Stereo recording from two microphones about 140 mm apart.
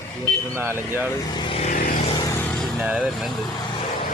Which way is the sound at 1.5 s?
60° left (ahead or behind).